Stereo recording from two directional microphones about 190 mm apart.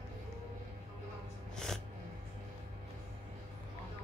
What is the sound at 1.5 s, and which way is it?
Snort, centre (ahead or behind).